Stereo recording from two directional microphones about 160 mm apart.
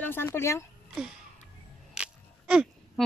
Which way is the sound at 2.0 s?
5° right (ahead or behind).